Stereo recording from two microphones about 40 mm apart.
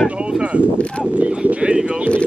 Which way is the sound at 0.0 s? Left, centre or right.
Right.